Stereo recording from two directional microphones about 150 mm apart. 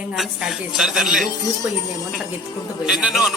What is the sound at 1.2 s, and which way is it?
Speech, 25° left (ahead or behind).